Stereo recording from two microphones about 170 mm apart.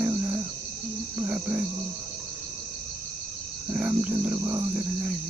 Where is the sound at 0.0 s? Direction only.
15° right (ahead or behind).